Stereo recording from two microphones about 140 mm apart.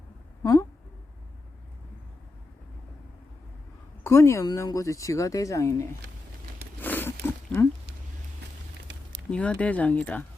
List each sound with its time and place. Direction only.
0.4 s a sound: 25° left (ahead or behind)
4.0 s speech: 20° left (ahead or behind)
6.8 s wild animals: 15° left (ahead or behind)
9.3 s speech: 10° left (ahead or behind)